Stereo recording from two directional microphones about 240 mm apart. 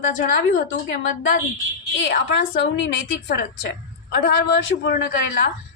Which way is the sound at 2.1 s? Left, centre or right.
Left.